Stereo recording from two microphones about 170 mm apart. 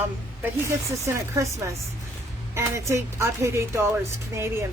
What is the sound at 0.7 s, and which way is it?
Speech, 15° right (ahead or behind).